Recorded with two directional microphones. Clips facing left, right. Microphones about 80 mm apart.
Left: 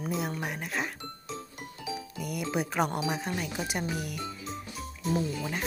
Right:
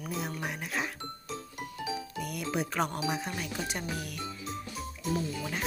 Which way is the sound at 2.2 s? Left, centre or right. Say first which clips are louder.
Left 3 dB; centre.